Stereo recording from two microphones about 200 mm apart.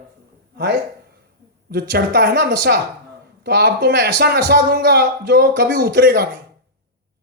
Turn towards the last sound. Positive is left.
turn(degrees=-55)  # may be behind; listen again after turning